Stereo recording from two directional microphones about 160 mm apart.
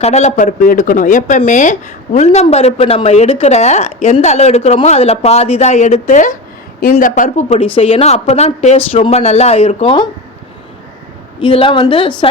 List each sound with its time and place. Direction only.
0.0 s speech: 45° left (ahead or behind)
7.6 s speech: 35° left (ahead or behind)
11.3 s speech: 35° left (ahead or behind)